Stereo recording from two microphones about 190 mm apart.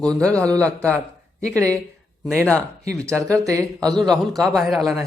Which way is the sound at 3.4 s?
15° right (ahead or behind).